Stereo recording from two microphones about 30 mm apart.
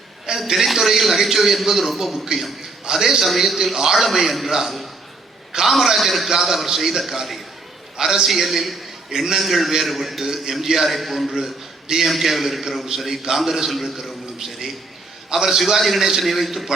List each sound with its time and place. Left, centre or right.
0.3 s a man's voice: centre
5.5 s a sound: centre
5.7 s a man's voice: centre
7.9 s a man's voice: centre
8.3 s a man's voice: centre
11.9 s a man's voice: right
12.2 s a man's voice: centre
15.5 s a man's voice: centre